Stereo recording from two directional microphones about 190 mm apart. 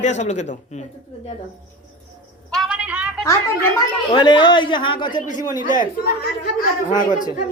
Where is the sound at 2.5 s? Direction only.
5° right (ahead or behind).